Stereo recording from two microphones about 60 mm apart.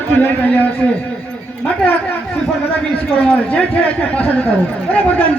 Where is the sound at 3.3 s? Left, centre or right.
Left.